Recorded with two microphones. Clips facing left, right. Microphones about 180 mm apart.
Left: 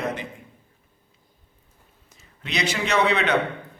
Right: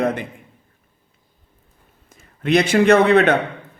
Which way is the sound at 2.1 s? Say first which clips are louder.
Right 16 dB; 55° right (ahead or behind).